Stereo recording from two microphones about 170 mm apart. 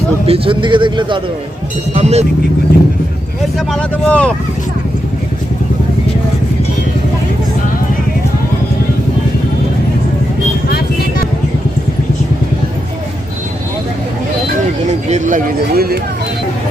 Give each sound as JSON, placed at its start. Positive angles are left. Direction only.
{"t": 0.3, "sound": "a man's voice", "side_deg": -30}
{"t": 1.9, "sound": "speech", "side_deg": -40}
{"t": 3.7, "sound": "speech", "side_deg": 5}
{"t": 14.8, "sound": "speech", "side_deg": -45}